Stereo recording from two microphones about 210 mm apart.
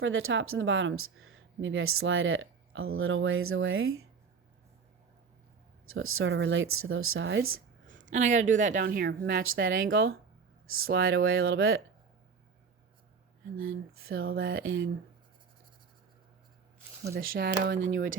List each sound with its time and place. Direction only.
0.0 s speech: 75° right (ahead or behind)
5.9 s speech: 75° right (ahead or behind)
8.1 s a woman's voice: 35° right (ahead or behind)
10.7 s speech: 80° right
13.6 s speech: 70° right (ahead or behind)
17.1 s speech: 45° right (ahead or behind)